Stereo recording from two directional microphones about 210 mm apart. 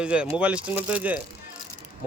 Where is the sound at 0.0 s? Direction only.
5° right (ahead or behind).